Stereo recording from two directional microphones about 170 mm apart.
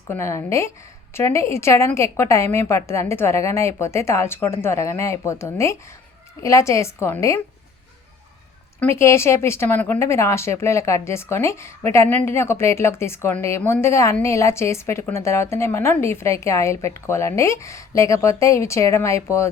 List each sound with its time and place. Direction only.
0.1 s speech: 15° left (ahead or behind)
8.8 s speech: 15° left (ahead or behind)